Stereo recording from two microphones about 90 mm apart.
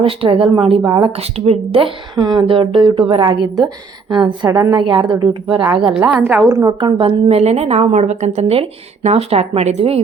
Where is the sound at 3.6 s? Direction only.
60° right (ahead or behind).